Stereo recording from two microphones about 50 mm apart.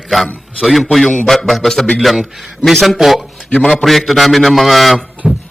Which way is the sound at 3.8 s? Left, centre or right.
Centre.